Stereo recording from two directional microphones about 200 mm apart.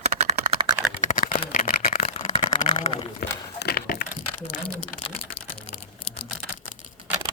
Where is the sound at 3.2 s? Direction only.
50° left (ahead or behind).